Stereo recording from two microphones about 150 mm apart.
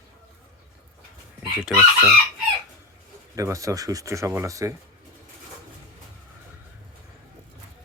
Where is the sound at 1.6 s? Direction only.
5° right (ahead or behind).